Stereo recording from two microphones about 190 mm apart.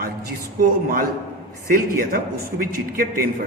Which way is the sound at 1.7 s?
50° right (ahead or behind).